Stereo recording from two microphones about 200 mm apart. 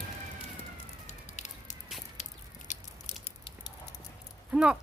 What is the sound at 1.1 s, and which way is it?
Fire, 35° left (ahead or behind).